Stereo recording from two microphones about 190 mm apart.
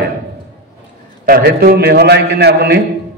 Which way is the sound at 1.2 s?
50° right (ahead or behind).